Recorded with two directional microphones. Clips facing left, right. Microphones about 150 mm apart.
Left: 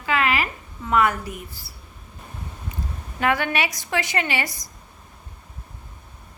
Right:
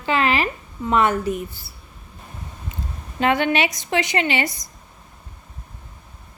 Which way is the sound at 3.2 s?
25° right (ahead or behind).